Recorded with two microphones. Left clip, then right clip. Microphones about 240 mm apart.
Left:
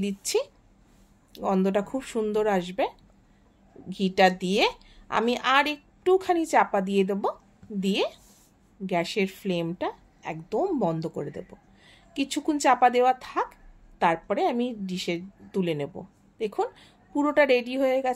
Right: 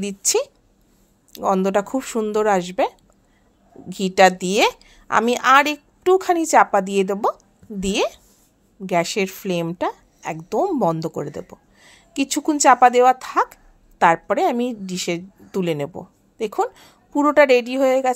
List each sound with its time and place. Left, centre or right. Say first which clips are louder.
0.0 s a woman's voice: right 6 dB; centre
3.9 s a woman's voice: right 7 dB; centre